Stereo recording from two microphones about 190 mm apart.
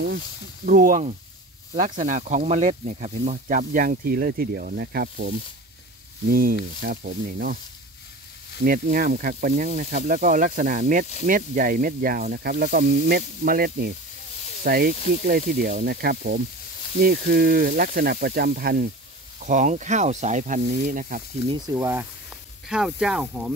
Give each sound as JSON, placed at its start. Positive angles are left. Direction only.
{"t": 0.7, "sound": "speech", "side_deg": -45}
{"t": 8.6, "sound": "speech", "side_deg": -45}
{"t": 19.4, "sound": "speech", "side_deg": -40}
{"t": 21.5, "sound": "speech", "side_deg": -15}